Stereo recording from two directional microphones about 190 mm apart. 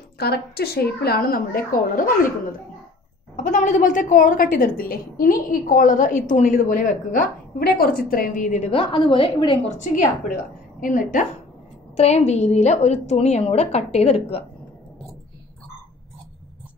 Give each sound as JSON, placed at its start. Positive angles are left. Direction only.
{"t": 0.2, "sound": "a woman's voice", "side_deg": 55}
{"t": 3.3, "sound": "a woman's voice", "side_deg": 40}
{"t": 9.9, "sound": "a woman's voice", "side_deg": 45}